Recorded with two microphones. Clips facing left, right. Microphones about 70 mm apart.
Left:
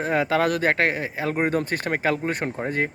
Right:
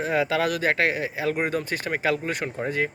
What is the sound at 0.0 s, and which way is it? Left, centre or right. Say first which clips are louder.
Speech: left 2 dB; left.